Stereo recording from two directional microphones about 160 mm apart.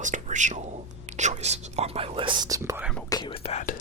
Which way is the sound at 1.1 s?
45° right (ahead or behind).